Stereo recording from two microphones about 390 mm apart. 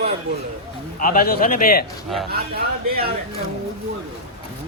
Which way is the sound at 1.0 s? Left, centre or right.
Left.